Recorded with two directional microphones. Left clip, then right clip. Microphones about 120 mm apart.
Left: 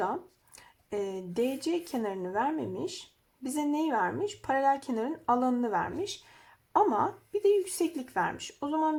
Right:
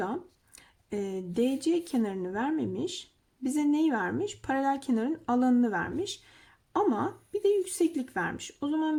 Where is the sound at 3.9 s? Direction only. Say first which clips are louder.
Left 1 dB; 20° right (ahead or behind).